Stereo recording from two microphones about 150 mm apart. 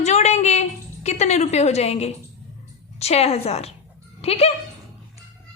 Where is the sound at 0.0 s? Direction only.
50° left (ahead or behind).